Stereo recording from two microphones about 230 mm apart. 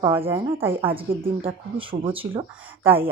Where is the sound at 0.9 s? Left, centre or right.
Right.